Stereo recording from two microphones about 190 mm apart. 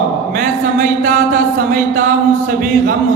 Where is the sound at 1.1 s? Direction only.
45° right (ahead or behind).